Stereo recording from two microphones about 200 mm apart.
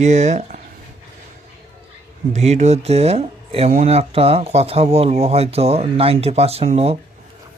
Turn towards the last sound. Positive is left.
turn(degrees=-30)  # may be behind; listen again after turning